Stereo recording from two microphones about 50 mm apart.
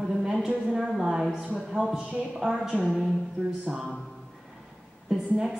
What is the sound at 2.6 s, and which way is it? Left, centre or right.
Speech, centre.